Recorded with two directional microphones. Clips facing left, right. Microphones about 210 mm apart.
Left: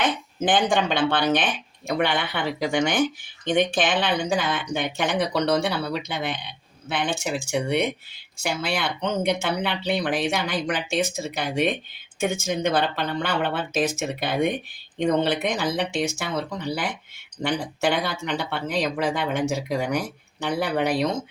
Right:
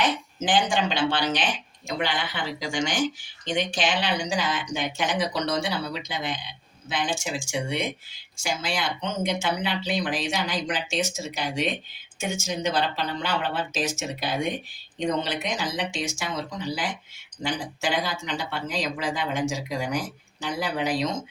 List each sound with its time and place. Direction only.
0.0 s speech: 55° left (ahead or behind)